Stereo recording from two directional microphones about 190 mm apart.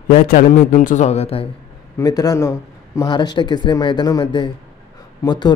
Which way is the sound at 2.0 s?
20° left (ahead or behind).